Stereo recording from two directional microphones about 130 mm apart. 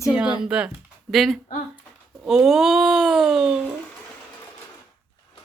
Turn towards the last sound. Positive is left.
turn(degrees=-5)  # may be behind; listen again after turning